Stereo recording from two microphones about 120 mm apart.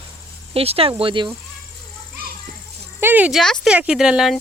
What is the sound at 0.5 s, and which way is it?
Speech, 55° right (ahead or behind).